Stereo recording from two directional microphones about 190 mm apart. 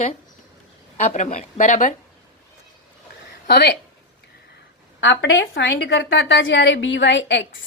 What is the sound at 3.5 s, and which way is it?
Speech, 60° left (ahead or behind).